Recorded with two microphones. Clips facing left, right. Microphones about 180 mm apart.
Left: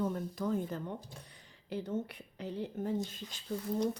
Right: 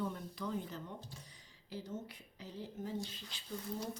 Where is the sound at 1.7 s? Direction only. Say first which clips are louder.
Left 8 dB; 60° left (ahead or behind).